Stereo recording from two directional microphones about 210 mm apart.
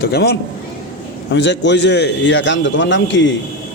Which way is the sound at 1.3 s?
60° left (ahead or behind).